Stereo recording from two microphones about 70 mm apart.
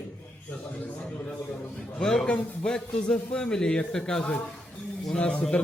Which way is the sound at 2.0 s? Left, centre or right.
Centre.